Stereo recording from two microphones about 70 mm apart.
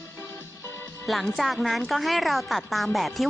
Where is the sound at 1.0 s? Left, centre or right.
Centre.